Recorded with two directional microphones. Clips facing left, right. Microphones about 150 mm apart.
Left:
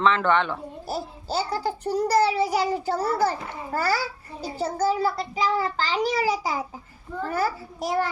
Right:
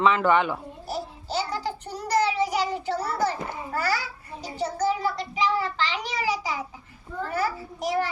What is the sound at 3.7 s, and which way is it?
A child's voice, 35° left (ahead or behind).